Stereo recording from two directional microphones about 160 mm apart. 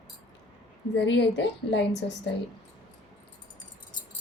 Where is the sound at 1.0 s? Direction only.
90° left.